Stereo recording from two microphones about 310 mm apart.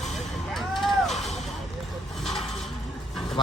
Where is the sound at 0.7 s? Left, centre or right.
Centre.